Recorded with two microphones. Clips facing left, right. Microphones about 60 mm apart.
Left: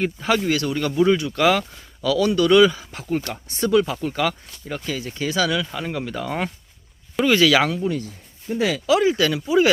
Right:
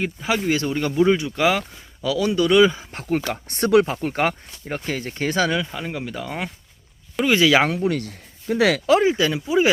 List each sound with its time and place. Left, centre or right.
0.0 s speech: centre
0.5 s speech: right
2.9 s speech: right
3.5 s speech: right
4.0 s speech: right
5.6 s speech: centre
7.3 s speech: right
7.7 s speech: right
8.9 s speech: right